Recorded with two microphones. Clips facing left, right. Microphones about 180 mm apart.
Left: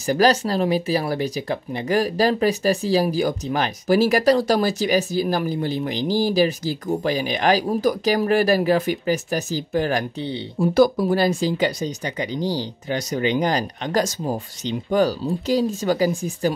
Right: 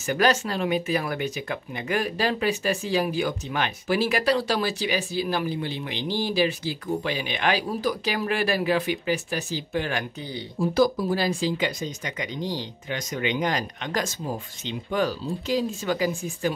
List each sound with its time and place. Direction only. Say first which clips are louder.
0.0 s speech: left 5 dB; 35° left (ahead or behind)
10.6 s speech: left 5 dB; 65° left (ahead or behind)
11.2 s speech: left 5 dB; 40° left (ahead or behind)